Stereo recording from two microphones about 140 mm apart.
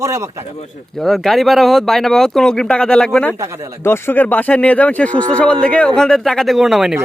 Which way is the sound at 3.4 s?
20° right (ahead or behind).